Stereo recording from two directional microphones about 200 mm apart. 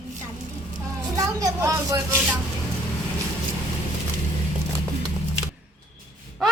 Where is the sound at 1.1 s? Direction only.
15° right (ahead or behind).